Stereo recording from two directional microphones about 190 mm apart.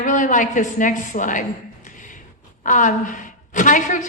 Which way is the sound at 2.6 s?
40° left (ahead or behind).